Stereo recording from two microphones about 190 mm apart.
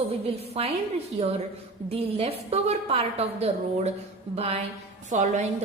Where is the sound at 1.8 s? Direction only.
30° right (ahead or behind).